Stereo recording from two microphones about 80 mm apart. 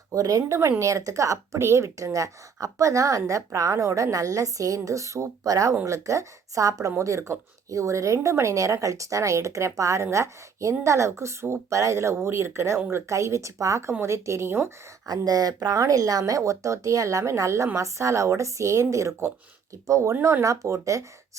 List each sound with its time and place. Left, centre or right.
0.1 s speech: right
15.0 s speech: right